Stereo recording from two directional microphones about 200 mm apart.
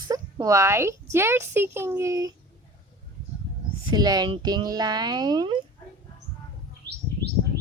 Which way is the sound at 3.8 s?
20° right (ahead or behind).